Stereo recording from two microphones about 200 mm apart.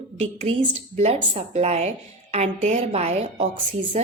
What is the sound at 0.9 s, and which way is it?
A woman's voice, 35° right (ahead or behind).